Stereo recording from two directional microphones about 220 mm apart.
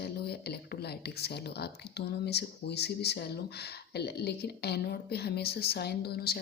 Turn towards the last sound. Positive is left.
turn(degrees=45)  # may be behind; listen again after turning